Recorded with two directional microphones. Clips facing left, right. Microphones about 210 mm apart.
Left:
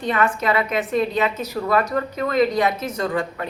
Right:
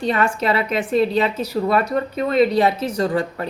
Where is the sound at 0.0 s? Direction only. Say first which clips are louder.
Right 1 dB; 30° right (ahead or behind).